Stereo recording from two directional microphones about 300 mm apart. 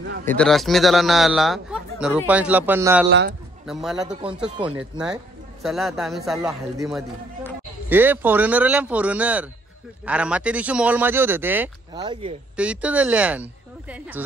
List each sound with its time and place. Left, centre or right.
0.2 s speech: centre
3.1 s a man's voice: right
3.6 s speech: centre
12.5 s speech: centre